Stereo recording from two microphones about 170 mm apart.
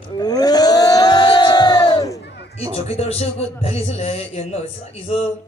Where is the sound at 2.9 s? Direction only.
40° left (ahead or behind).